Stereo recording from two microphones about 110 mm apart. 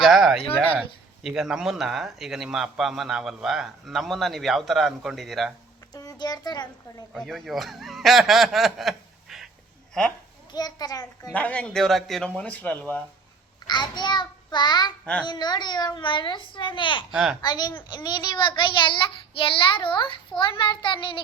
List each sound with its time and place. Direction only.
0.0 s a sound: centre (ahead or behind)
0.8 s speech: centre (ahead or behind)
5.9 s a sound: 35° left (ahead or behind)
7.1 s speech: centre (ahead or behind)
10.5 s a child's voice: 40° left (ahead or behind)
11.3 s speech: 10° left (ahead or behind)
13.7 s a child's voice: 40° left (ahead or behind)
17.1 s speech: 5° right (ahead or behind)
17.4 s a child's voice: 40° left (ahead or behind)